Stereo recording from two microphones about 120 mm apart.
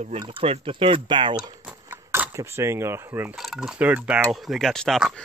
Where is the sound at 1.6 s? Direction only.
15° right (ahead or behind).